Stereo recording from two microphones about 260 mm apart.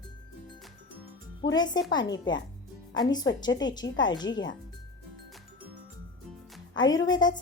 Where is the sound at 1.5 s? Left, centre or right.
Centre.